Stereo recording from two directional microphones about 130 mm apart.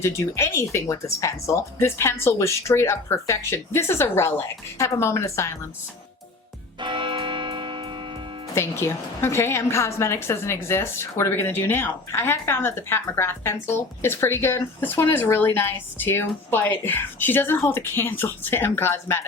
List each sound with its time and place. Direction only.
0.0 s a woman's voice: 20° left (ahead or behind)
6.7 s music: 40° right (ahead or behind)
8.5 s a woman's voice: 20° left (ahead or behind)